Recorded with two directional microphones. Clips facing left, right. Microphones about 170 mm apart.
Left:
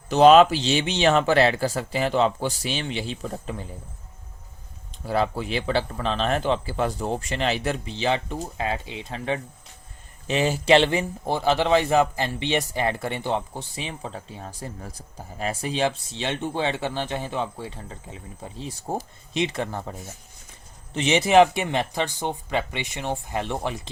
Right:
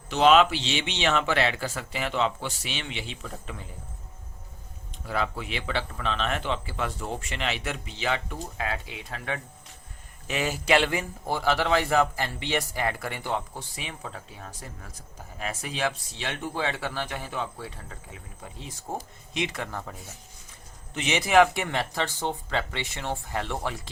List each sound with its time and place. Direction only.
0.1 s a man's voice: 40° left (ahead or behind)
5.0 s a man's voice: 35° left (ahead or behind); by 23.9 s 20° left (ahead or behind)